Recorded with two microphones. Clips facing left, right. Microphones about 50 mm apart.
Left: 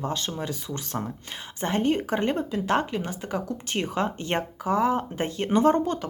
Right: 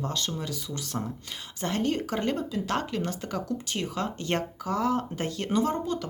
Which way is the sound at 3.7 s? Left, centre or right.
Left.